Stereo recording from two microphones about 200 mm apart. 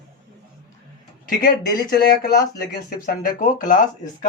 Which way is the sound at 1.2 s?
45° left (ahead or behind).